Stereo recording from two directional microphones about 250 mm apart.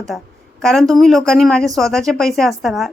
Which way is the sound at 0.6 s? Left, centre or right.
Centre.